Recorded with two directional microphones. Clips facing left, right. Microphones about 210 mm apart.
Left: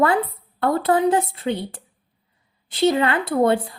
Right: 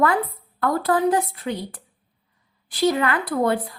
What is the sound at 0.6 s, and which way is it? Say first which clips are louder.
A woman's voice: left 2 dB; 25° left (ahead or behind).